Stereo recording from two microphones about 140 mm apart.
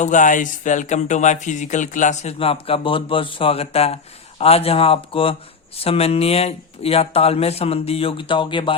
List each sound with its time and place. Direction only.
0.0 s speech: 65° left (ahead or behind)
2.4 s speech: 45° left (ahead or behind)